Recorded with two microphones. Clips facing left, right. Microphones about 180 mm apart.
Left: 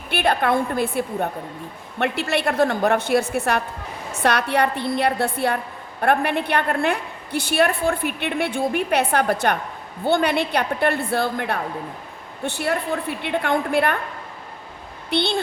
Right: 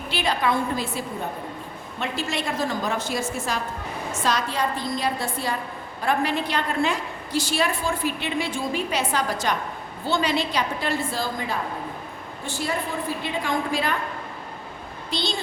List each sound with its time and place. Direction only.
0.1 s a woman's voice: 55° left (ahead or behind)
15.1 s a woman's voice: 60° left (ahead or behind)